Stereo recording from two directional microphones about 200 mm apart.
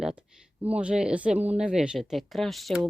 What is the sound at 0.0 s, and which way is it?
Speech, 5° right (ahead or behind).